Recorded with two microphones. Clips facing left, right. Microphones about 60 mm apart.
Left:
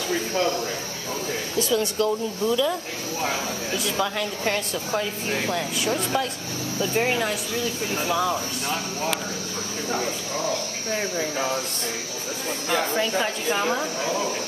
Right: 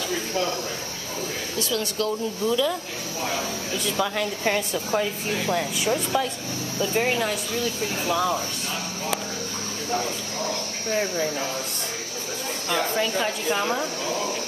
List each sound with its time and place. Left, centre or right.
1.6 s speech: left
2.4 s speech: centre
4.2 s a woman's voice: centre
12.6 s speech: centre